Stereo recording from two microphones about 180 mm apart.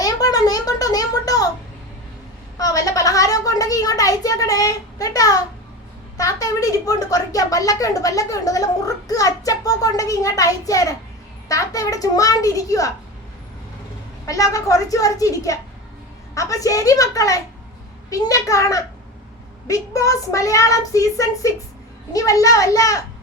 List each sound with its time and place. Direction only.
0.0 s a sound: 20° left (ahead or behind)
2.6 s a woman's voice: 20° left (ahead or behind)
14.3 s a woman's voice: 20° left (ahead or behind)